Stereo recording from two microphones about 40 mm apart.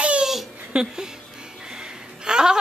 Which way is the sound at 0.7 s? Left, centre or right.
Centre.